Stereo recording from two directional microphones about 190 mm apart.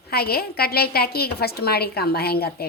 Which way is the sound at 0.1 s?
55° left (ahead or behind).